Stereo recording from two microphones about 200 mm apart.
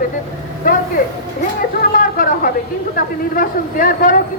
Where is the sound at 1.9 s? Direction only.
45° left (ahead or behind).